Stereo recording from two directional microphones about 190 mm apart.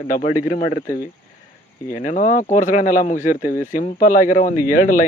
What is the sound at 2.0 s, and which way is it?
Speech, 40° left (ahead or behind).